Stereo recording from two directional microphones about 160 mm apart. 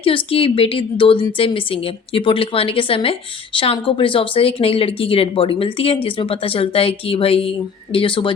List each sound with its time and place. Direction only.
0.0 s a woman's voice: 35° left (ahead or behind)